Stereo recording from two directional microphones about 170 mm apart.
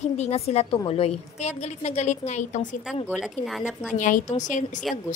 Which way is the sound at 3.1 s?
Centre (ahead or behind).